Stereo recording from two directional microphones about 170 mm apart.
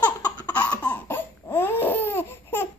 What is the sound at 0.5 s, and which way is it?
Laughter, 10° left (ahead or behind).